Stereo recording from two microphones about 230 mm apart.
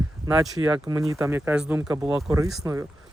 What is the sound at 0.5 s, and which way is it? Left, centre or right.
Speech, centre.